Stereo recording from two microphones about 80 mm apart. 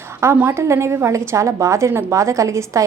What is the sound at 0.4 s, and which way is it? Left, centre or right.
A woman's voice, right.